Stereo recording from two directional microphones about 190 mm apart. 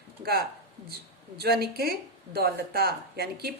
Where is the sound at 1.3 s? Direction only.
55° right (ahead or behind).